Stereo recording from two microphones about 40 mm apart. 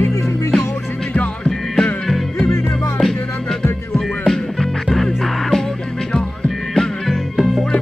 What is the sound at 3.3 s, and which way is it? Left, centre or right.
Music, centre.